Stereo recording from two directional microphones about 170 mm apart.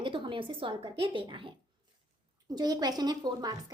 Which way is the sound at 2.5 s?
25° right (ahead or behind).